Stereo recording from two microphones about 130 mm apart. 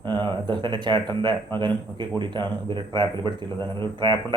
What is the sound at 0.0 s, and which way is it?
Speech, 35° right (ahead or behind).